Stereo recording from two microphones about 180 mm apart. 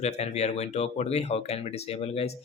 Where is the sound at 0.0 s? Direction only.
35° left (ahead or behind).